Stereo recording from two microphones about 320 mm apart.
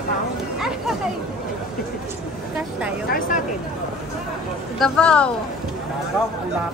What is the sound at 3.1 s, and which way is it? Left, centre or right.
Speech, left.